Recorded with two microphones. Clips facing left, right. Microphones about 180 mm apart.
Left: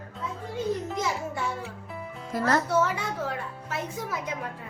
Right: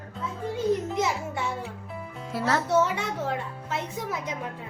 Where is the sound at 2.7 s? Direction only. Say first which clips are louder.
Right 2 dB; 25° right (ahead or behind).